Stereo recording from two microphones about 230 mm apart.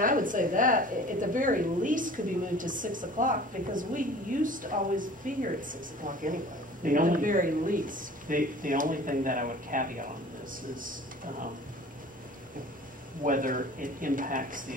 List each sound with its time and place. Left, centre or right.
0.0 s a woman's voice: right
13.2 s a woman's voice: right